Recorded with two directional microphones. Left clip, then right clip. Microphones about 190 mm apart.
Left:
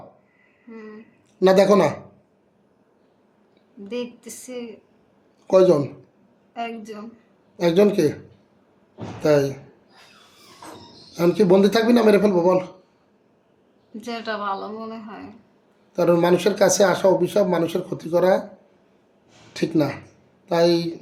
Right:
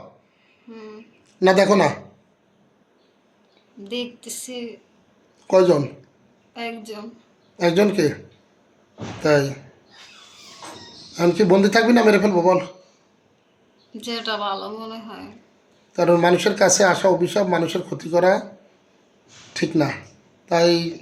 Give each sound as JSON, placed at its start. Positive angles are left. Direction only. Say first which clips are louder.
{"t": 0.7, "sound": "a woman's voice", "louder": "right 1 dB", "side_deg": 10}
{"t": 4.0, "sound": "speech", "louder": "right 2 dB", "side_deg": 30}
{"t": 5.5, "sound": "speech", "louder": "even", "side_deg": 5}
{"t": 9.2, "sound": "speech", "louder": "even", "side_deg": 5}
{"t": 11.1, "sound": "speech", "louder": "even", "side_deg": 5}
{"t": 14.0, "sound": "a woman's voice", "louder": "right 2 dB", "side_deg": 5}
{"t": 19.5, "sound": "a woman's voice", "louder": "right 1 dB", "side_deg": 5}